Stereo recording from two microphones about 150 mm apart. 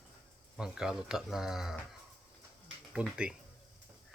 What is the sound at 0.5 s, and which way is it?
Speech, 5° right (ahead or behind).